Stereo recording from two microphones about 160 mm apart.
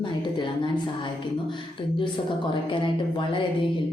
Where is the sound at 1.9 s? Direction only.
30° left (ahead or behind).